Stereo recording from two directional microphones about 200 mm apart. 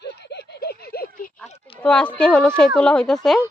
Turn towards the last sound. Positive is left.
turn(degrees=0)  # may be behind; listen again after turning